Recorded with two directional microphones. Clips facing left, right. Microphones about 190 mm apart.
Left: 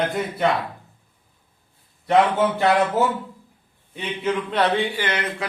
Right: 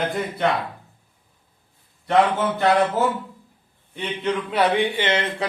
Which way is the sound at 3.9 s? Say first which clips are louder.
Even; 5° left (ahead or behind).